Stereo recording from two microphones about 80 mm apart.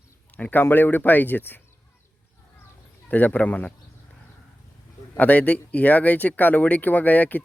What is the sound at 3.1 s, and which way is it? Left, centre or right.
Speech, centre.